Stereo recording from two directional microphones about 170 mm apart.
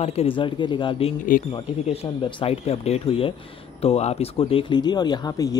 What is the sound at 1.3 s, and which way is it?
Speech, 45° left (ahead or behind).